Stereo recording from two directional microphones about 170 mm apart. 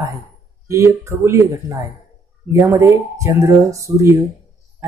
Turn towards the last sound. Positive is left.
turn(degrees=-20)  # may be behind; listen again after turning